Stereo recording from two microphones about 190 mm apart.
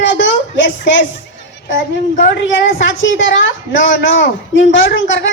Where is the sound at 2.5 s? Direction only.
85° left.